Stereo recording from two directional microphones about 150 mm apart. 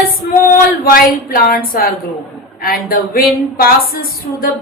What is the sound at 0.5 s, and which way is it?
A woman's voice, 80° left.